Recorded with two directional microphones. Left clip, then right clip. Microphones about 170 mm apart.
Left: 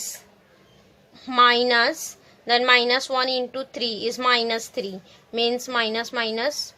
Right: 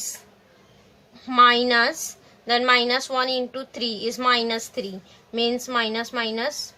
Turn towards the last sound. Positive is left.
turn(degrees=30)  # may be behind; listen again after turning